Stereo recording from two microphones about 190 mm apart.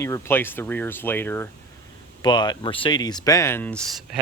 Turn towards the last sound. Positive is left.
turn(degrees=0)  # may be behind; listen again after turning